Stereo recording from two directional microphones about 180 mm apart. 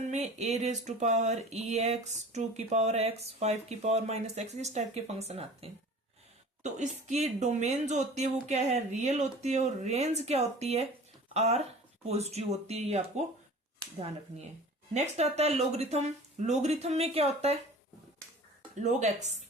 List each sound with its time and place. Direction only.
0.0 s speech: 40° right (ahead or behind)
14.9 s speech: 35° right (ahead or behind)
18.8 s speech: 40° right (ahead or behind)